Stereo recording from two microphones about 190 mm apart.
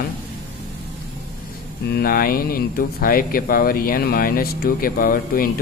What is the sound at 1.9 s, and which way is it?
Speech, 50° left (ahead or behind).